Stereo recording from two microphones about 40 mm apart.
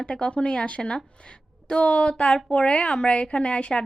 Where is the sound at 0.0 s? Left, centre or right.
Left.